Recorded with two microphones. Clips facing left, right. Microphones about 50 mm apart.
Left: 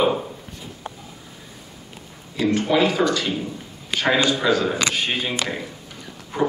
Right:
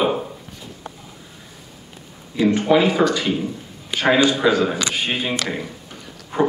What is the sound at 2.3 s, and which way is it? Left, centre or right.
A man's voice, centre.